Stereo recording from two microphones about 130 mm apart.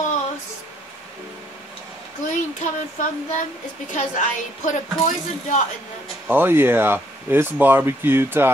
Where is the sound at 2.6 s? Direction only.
75° left (ahead or behind).